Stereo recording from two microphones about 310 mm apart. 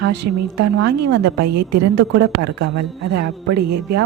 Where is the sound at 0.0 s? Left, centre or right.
Right.